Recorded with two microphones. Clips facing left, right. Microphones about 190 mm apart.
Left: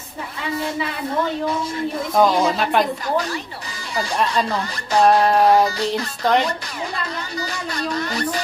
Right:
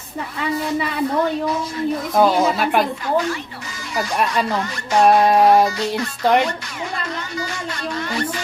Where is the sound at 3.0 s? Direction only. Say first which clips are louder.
Right 2 dB; 40° left (ahead or behind).